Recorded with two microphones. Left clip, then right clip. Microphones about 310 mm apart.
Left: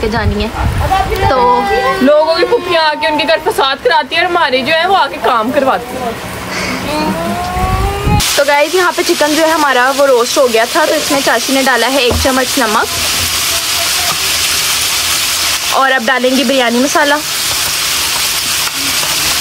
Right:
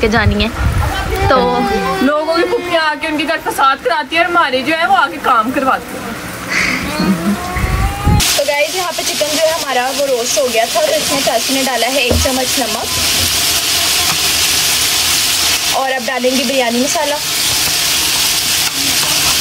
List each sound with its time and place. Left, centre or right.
2.0 s a man's voice: left
8.5 s speech: centre
11.7 s speech: centre
15.7 s speech: left
16.3 s speech: centre